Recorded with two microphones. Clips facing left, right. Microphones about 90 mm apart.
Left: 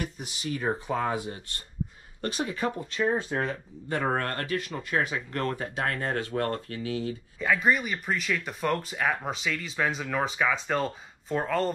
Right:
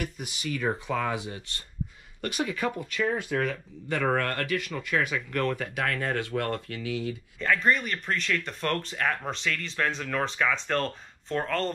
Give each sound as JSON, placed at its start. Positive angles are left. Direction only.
{"t": 0.5, "sound": "speech", "side_deg": 30}
{"t": 2.3, "sound": "speech", "side_deg": 30}
{"t": 7.3, "sound": "speech", "side_deg": 5}